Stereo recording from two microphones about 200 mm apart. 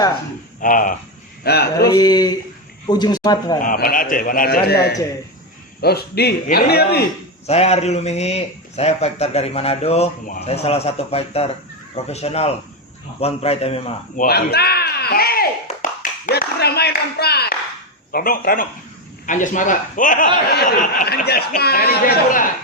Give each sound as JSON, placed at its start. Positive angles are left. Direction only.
{"t": 0.6, "sound": "a man's voice", "side_deg": 40}
{"t": 1.5, "sound": "a man's voice", "side_deg": 55}
{"t": 1.8, "sound": "speech", "side_deg": 15}
{"t": 3.6, "sound": "a man's voice", "side_deg": 45}
{"t": 7.4, "sound": "a man's voice", "side_deg": 30}
{"t": 14.3, "sound": "a man's voice", "side_deg": 50}